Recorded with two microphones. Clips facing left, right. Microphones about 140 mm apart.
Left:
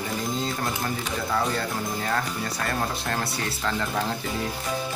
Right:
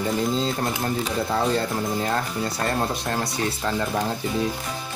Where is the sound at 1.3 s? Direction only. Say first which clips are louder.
Right 3 dB; 25° right (ahead or behind).